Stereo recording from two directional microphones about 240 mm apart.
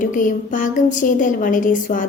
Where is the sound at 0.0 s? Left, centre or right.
Left.